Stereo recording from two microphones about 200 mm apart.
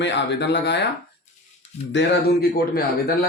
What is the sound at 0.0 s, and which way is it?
Speech, 60° left (ahead or behind).